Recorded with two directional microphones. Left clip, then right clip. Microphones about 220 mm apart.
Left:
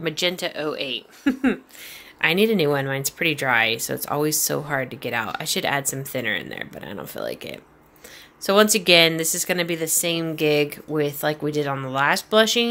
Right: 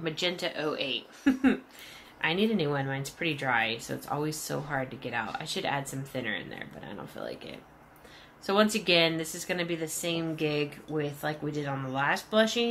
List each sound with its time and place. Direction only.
0.0 s speech: 50° left (ahead or behind)